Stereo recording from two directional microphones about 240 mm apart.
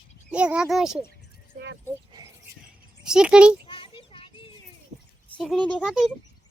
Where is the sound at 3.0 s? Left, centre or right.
Centre.